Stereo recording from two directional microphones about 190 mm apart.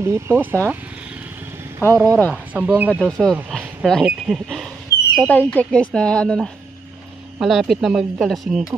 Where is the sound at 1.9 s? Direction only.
15° right (ahead or behind).